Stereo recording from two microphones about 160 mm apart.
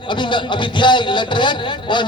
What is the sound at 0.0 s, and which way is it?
A man's voice, 30° left (ahead or behind).